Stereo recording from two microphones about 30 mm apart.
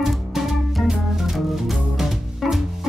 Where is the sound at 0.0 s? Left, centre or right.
Centre.